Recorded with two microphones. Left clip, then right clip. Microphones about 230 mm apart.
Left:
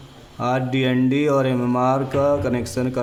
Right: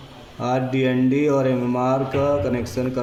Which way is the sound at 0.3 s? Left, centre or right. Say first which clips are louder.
Even; left.